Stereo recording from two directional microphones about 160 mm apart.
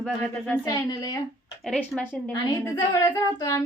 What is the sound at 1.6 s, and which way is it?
A woman's voice, 5° left (ahead or behind).